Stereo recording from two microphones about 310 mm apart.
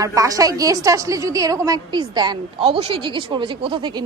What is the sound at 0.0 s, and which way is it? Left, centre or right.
A woman's voice, centre.